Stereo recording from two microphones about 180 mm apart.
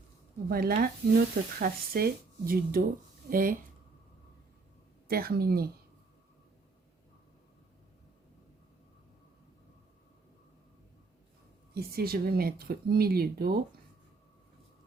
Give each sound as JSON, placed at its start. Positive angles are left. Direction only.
{"t": 0.4, "sound": "speech", "side_deg": -60}
{"t": 5.0, "sound": "speech", "side_deg": -55}
{"t": 11.7, "sound": "speech", "side_deg": -60}